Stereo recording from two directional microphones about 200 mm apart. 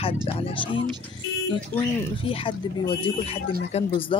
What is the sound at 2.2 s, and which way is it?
Speech, 25° left (ahead or behind).